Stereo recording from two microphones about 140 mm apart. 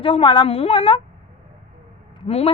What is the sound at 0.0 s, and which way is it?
Speech, 40° left (ahead or behind).